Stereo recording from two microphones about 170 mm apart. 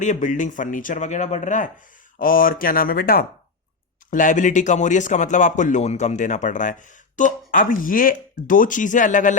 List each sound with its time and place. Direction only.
0.0 s speech: 45° left (ahead or behind)
4.1 s speech: 50° left (ahead or behind)